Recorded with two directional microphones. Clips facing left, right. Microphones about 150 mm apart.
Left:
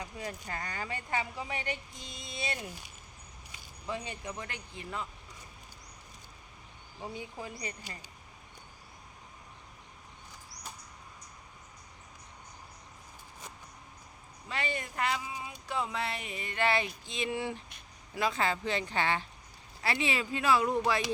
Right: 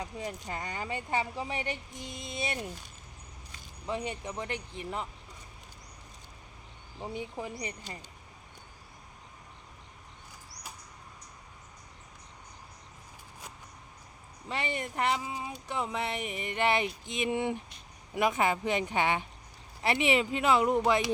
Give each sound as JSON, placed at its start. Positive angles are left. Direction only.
{"t": 0.0, "sound": "speech", "side_deg": -20}
{"t": 3.8, "sound": "speech", "side_deg": -20}
{"t": 7.0, "sound": "speech", "side_deg": -20}
{"t": 14.4, "sound": "speech", "side_deg": -25}